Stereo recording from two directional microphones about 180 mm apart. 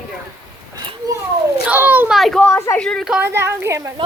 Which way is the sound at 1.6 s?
10° right (ahead or behind).